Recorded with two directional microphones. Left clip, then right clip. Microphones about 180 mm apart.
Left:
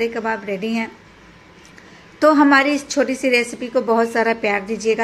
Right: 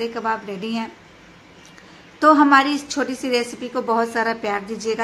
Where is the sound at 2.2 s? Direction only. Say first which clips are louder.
Even; 15° left (ahead or behind).